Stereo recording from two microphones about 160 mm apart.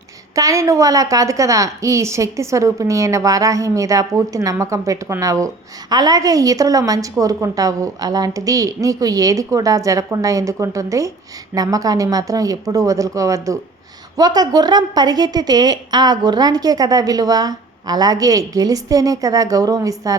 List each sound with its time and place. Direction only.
0.3 s a woman's voice: 20° right (ahead or behind)